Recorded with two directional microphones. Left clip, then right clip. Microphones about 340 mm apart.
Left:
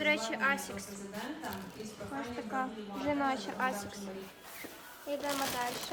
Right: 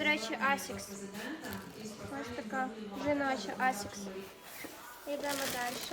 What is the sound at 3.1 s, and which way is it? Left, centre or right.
Speech, centre.